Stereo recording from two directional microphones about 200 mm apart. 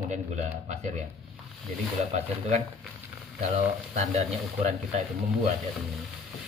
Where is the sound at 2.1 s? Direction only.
35° right (ahead or behind).